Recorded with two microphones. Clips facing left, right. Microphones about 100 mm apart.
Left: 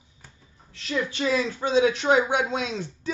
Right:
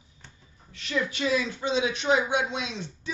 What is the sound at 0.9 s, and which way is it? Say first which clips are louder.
A woman's voice: left 1 dB; 30° left (ahead or behind).